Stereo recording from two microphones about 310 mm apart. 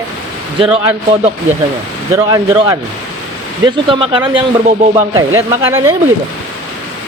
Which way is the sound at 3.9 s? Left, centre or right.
Centre.